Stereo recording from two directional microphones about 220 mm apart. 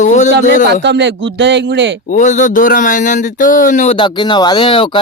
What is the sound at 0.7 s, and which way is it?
Speech, 50° right (ahead or behind).